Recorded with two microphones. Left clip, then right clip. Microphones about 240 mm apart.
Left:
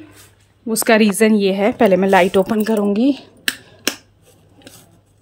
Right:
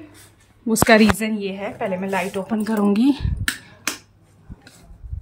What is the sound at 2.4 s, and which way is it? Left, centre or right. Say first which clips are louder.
Speech: left 6 dB; centre.